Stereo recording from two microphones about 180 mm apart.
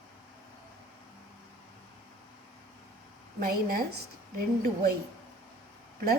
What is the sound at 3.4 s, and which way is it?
Speech, 55° right (ahead or behind).